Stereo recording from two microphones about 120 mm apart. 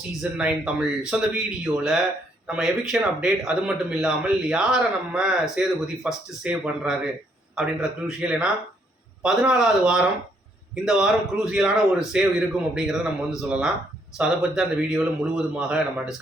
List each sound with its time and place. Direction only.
0.2 s a man's voice: 10° right (ahead or behind)